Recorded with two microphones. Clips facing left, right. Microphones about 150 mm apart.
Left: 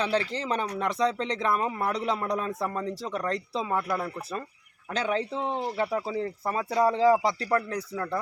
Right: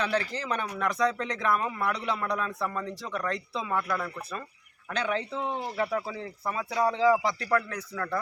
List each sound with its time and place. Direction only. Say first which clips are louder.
0.0 s speech: left 2 dB; 30° left (ahead or behind)